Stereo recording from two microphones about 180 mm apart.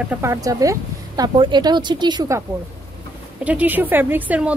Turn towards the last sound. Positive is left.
turn(degrees=-10)  # may be behind; listen again after turning